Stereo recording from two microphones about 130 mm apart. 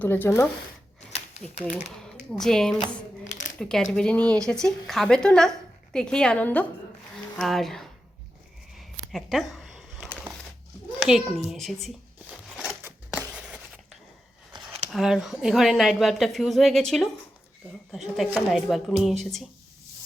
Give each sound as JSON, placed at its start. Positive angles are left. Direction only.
{"t": 0.0, "sound": "speech", "side_deg": 15}
{"t": 1.4, "sound": "speech", "side_deg": 5}
{"t": 8.7, "sound": "a sound", "side_deg": 0}
{"t": 11.0, "sound": "a child's voice", "side_deg": -5}
{"t": 13.1, "sound": "a sound", "side_deg": -10}
{"t": 14.8, "sound": "speech", "side_deg": 0}